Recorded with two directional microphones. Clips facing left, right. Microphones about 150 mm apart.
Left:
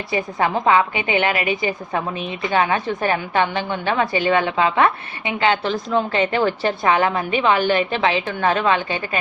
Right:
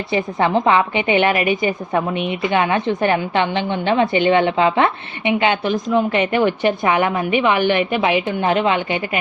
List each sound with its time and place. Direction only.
0.1 s a woman's voice: 25° right (ahead or behind)
2.8 s a woman's voice: 25° right (ahead or behind)